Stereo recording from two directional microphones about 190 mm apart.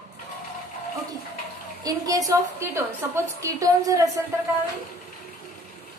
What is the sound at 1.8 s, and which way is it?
A woman's voice, 20° right (ahead or behind).